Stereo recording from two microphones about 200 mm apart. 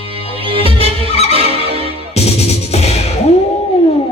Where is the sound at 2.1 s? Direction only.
30° left (ahead or behind).